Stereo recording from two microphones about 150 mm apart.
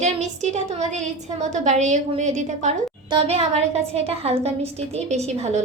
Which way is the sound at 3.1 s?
40° right (ahead or behind).